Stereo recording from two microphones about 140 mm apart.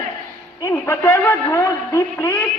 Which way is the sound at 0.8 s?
15° left (ahead or behind).